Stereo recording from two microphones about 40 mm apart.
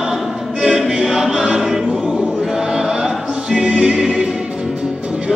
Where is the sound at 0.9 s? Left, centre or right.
Centre.